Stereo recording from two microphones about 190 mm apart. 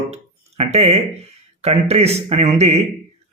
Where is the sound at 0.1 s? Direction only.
35° right (ahead or behind).